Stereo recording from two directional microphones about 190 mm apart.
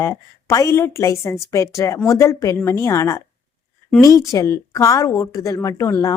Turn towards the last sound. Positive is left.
turn(degrees=20)  # may be behind; listen again after turning